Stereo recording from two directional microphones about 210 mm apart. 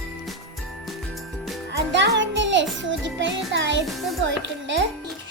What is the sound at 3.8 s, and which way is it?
Music, centre (ahead or behind).